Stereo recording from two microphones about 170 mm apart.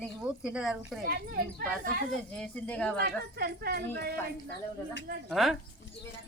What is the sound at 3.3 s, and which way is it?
Speech, 70° right (ahead or behind).